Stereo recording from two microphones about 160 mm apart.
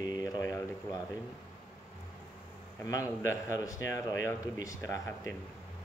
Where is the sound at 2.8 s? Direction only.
20° left (ahead or behind).